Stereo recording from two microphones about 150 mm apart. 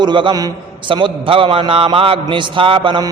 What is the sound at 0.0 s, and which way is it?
A man's voice, 30° right (ahead or behind).